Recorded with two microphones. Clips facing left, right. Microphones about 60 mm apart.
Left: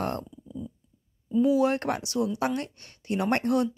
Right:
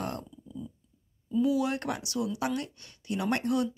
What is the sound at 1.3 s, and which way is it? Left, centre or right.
Speech, left.